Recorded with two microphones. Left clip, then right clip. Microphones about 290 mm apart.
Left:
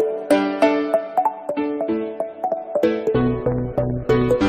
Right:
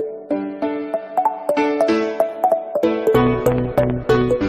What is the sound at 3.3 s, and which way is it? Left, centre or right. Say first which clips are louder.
Music: right 5 dB; right.